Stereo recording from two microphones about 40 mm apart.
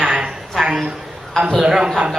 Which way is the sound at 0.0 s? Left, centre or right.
Right.